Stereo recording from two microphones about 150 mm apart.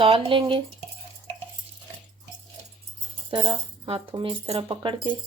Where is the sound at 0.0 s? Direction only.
40° right (ahead or behind).